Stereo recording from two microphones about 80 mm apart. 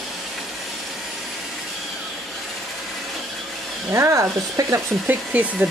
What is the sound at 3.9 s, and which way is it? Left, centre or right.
Speech, right.